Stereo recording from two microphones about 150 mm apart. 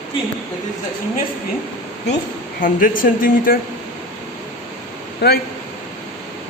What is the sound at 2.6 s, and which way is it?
Speech, 70° left (ahead or behind).